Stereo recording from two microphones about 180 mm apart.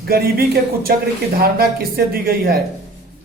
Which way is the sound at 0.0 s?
60° right (ahead or behind).